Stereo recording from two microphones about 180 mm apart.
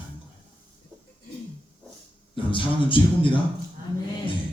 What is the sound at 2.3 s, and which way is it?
A man's voice, 30° left (ahead or behind).